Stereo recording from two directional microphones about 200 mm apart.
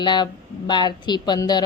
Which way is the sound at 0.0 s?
20° left (ahead or behind).